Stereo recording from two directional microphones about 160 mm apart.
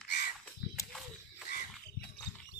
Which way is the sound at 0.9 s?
Centre (ahead or behind).